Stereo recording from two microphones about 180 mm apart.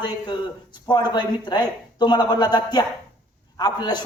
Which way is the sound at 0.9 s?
25° left (ahead or behind).